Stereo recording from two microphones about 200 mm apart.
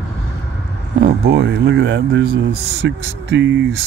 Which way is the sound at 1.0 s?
55° right (ahead or behind).